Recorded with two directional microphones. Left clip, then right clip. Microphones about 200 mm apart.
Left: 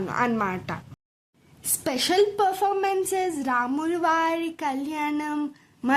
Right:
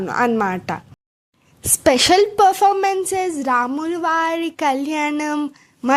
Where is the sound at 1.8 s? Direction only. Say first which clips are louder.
Right 9 dB; 40° right (ahead or behind).